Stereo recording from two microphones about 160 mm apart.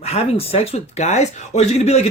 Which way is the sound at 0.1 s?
40° left (ahead or behind).